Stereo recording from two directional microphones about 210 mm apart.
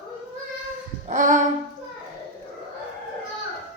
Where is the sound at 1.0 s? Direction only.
35° right (ahead or behind).